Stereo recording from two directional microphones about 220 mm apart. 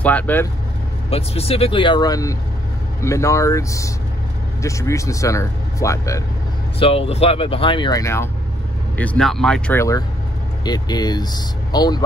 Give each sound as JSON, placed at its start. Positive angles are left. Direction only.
{"t": 0.0, "sound": "speech", "side_deg": 10}
{"t": 1.1, "sound": "speech", "side_deg": 25}
{"t": 6.8, "sound": "speech", "side_deg": 25}